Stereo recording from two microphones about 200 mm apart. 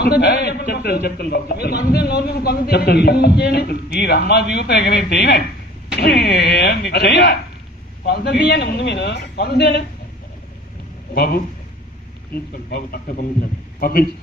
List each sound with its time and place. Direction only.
0.2 s a man's voice: 55° left (ahead or behind)
11.1 s a man's voice: 50° left (ahead or behind)